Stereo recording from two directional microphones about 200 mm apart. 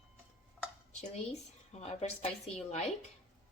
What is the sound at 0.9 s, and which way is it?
Speech, 35° left (ahead or behind).